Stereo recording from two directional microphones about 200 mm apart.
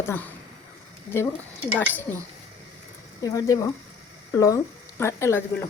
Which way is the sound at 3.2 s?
15° left (ahead or behind).